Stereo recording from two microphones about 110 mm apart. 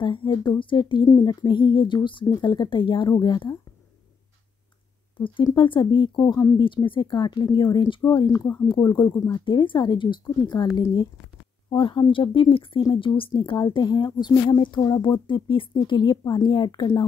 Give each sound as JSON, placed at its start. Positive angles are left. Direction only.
{"t": 0.0, "sound": "a woman's voice", "side_deg": 50}
{"t": 3.1, "sound": "speech", "side_deg": 40}
{"t": 5.6, "sound": "a woman's voice", "side_deg": 45}
{"t": 6.2, "sound": "speech", "side_deg": 25}
{"t": 6.6, "sound": "a woman's voice", "side_deg": 50}
{"t": 10.2, "sound": "a woman's voice", "side_deg": 35}